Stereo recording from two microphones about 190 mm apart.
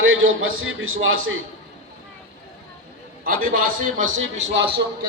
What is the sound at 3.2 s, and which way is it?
Speech, 50° right (ahead or behind).